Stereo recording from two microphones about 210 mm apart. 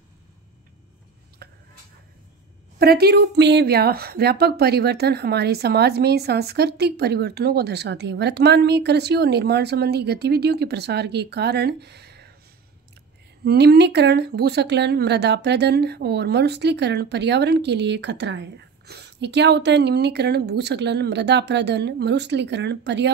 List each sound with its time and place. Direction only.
1.4 s a sound: 45° right (ahead or behind)
2.8 s a woman's voice: 50° right (ahead or behind)
13.4 s a woman's voice: 50° right (ahead or behind)